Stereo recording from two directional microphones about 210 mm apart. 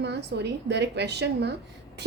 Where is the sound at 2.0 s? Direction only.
55° right (ahead or behind).